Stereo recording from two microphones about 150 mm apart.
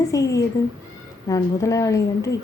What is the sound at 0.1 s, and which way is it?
A woman's voice, 20° left (ahead or behind).